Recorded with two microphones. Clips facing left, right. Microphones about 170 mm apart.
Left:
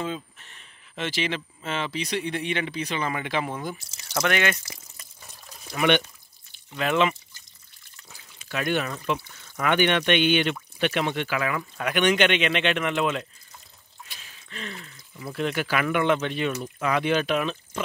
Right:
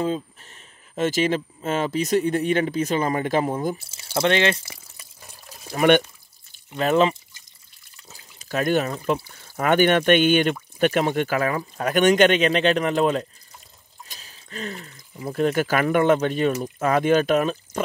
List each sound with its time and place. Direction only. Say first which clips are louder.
0.0 s speech: right 6 dB; 40° right (ahead or behind)
5.7 s speech: right 5 dB; 45° right (ahead or behind)